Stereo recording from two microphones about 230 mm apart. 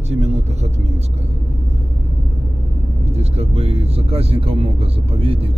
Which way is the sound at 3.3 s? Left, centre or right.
Right.